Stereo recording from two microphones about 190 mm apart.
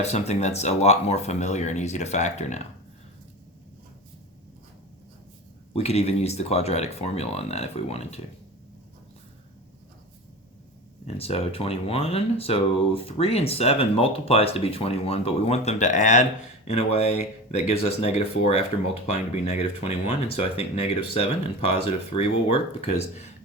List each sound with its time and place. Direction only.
0.0 s speech: 35° left (ahead or behind)
5.7 s speech: 35° left (ahead or behind)
11.0 s speech: 30° left (ahead or behind)